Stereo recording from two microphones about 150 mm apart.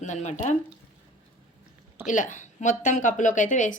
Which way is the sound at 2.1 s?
60° left (ahead or behind).